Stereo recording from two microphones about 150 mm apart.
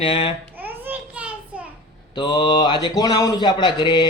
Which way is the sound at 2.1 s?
30° left (ahead or behind).